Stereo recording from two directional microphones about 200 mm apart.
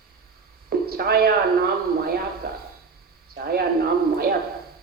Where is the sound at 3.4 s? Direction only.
50° right (ahead or behind).